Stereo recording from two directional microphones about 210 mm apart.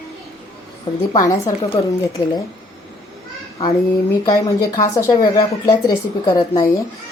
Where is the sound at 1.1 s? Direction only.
20° left (ahead or behind).